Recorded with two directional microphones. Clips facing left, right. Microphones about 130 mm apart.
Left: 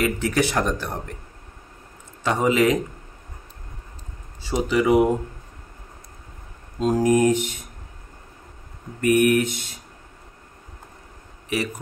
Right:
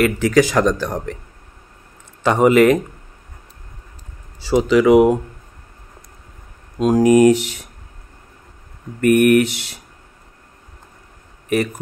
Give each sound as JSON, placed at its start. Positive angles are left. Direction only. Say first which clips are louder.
{"t": 0.0, "sound": "speech", "louder": "right 7 dB", "side_deg": -90}
{"t": 2.2, "sound": "speech", "louder": "right 7 dB", "side_deg": -65}
{"t": 4.4, "sound": "speech", "louder": "right 7 dB", "side_deg": -90}
{"t": 6.8, "sound": "speech", "louder": "right 6 dB", "side_deg": -80}
{"t": 9.0, "sound": "speech", "louder": "right 5 dB", "side_deg": -55}
{"t": 11.4, "sound": "speech", "louder": "right 7 dB", "side_deg": -50}